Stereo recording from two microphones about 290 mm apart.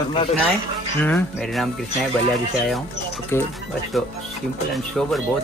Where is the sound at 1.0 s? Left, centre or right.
Centre.